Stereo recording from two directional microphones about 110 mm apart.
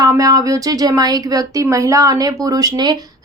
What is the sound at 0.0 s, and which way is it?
Speech, 35° right (ahead or behind).